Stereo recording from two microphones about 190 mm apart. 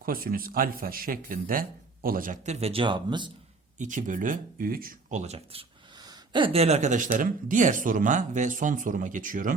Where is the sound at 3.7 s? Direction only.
40° right (ahead or behind).